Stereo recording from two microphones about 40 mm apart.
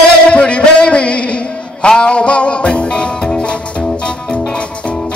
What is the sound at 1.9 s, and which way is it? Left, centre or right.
Music, left.